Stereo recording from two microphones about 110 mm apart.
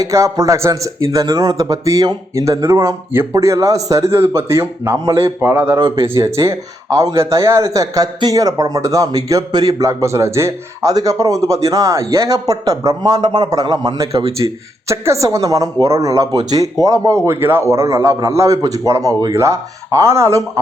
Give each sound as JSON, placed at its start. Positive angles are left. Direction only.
{"t": 0.0, "sound": "a woman's voice", "side_deg": -30}
{"t": 5.7, "sound": "speech", "side_deg": -45}
{"t": 6.2, "sound": "a woman's voice", "side_deg": -25}